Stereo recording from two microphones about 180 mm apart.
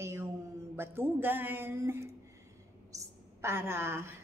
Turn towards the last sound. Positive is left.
turn(degrees=-15)  # may be behind; listen again after turning